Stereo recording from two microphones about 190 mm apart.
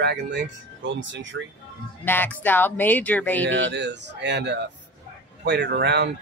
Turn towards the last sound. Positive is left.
turn(degrees=-60)  # may be behind; listen again after turning